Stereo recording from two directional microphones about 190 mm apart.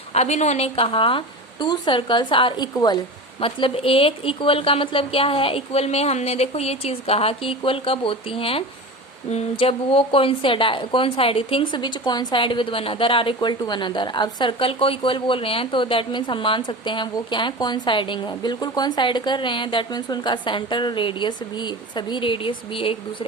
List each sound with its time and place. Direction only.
0.1 s a woman's voice: 35° left (ahead or behind)